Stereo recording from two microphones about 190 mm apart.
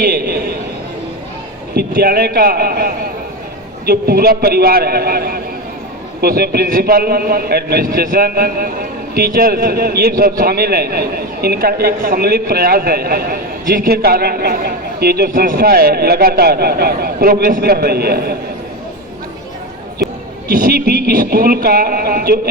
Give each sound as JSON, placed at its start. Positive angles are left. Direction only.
{"t": 0.0, "sound": "a sound", "side_deg": -60}
{"t": 2.0, "sound": "a man's voice", "side_deg": -55}
{"t": 20.6, "sound": "a man's voice", "side_deg": -55}